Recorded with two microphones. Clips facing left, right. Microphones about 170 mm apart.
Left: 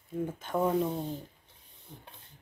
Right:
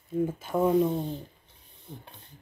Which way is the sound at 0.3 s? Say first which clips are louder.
Right 3 dB; 10° right (ahead or behind).